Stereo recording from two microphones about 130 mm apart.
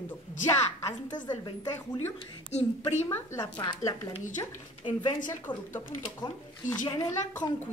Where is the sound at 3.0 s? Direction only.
20° left (ahead or behind).